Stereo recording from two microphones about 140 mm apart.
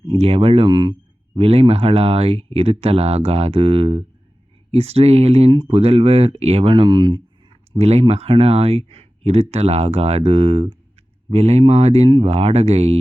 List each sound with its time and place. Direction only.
0.2 s speech: 45° right (ahead or behind)
1.4 s speech: 45° right (ahead or behind)
7.8 s speech: 50° right (ahead or behind)